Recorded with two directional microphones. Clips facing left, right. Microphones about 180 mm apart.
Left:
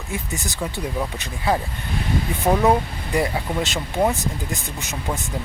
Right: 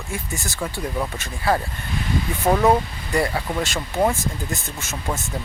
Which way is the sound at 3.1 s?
20° left (ahead or behind).